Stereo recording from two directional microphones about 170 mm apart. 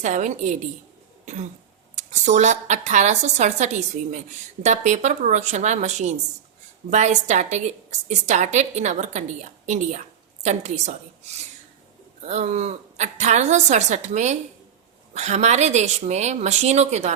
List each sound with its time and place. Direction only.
0.0 s a woman's voice: 45° right (ahead or behind)
1.2 s cough: 45° right (ahead or behind)
2.0 s a woman's voice: 45° right (ahead or behind)